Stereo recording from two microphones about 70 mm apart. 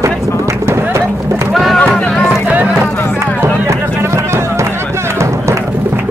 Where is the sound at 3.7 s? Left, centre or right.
Right.